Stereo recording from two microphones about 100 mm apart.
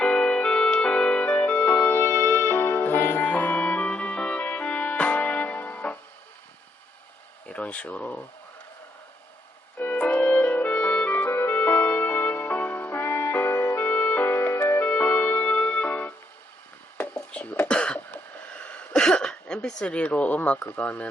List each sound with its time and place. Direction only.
0.0 s music: 10° left (ahead or behind)
7.4 s speech: 10° left (ahead or behind)
9.7 s music: 15° left (ahead or behind)
17.0 s a sound: 15° left (ahead or behind)
20.7 s speech: 15° left (ahead or behind)